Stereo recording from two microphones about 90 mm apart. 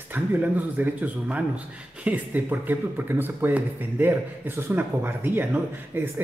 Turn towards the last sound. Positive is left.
turn(degrees=-20)  # may be behind; listen again after turning